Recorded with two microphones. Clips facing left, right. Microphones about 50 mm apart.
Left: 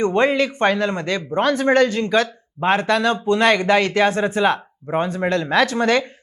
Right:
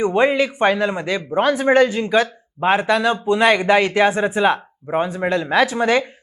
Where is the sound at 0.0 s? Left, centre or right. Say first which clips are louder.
Right 1 dB; centre.